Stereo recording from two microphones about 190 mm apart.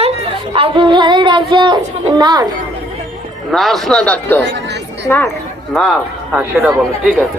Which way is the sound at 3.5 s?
Centre (ahead or behind).